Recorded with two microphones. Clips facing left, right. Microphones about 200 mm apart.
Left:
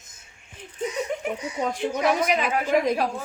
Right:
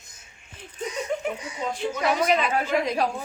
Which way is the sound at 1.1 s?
15° left (ahead or behind).